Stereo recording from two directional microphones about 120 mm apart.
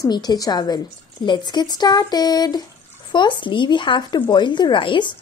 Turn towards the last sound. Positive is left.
turn(degrees=40)  # may be behind; listen again after turning